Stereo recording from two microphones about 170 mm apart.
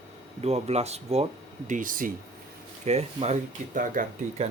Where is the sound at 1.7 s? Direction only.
55° right (ahead or behind).